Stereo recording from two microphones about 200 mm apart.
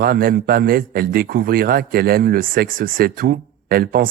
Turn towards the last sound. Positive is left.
turn(degrees=-45)  # may be behind; listen again after turning